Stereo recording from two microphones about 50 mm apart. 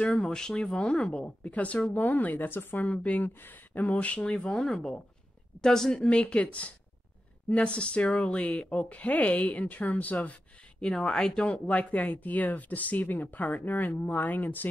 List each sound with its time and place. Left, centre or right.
0.1 s speech: centre
3.3 s speech: left; by 6.0 s centre
6.0 s speech: left
10.8 s speech: centre
11.4 s speech: left